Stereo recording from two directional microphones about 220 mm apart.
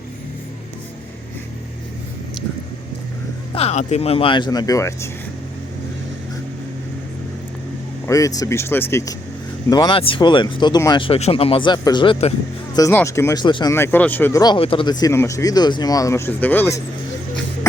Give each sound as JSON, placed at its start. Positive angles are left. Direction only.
{"t": 3.5, "sound": "speech", "side_deg": 30}
{"t": 8.0, "sound": "speech", "side_deg": 15}